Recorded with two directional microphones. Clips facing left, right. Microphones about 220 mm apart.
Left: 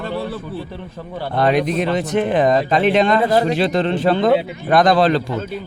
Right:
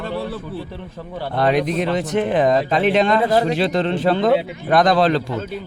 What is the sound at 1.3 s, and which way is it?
A man's voice, centre (ahead or behind).